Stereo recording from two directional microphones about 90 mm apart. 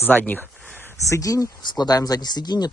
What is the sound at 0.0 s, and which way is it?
Speech, 20° left (ahead or behind).